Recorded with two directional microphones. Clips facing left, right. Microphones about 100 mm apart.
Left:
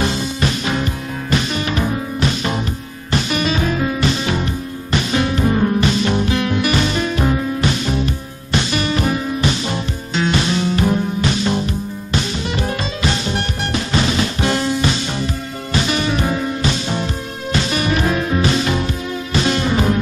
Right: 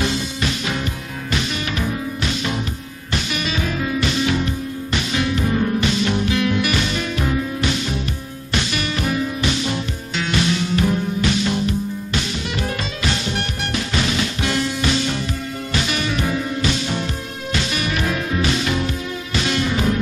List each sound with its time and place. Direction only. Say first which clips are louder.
0.0 s music: left 3 dB; 40° left (ahead or behind)